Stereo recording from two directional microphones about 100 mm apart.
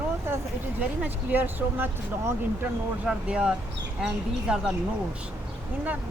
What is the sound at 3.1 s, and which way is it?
Speech, 10° right (ahead or behind).